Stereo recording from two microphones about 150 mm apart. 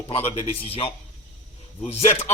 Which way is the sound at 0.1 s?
40° left (ahead or behind).